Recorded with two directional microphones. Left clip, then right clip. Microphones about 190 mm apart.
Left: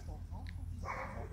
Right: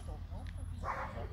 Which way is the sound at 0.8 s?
30° right (ahead or behind).